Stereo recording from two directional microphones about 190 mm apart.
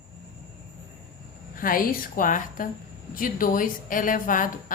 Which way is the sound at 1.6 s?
45° left (ahead or behind).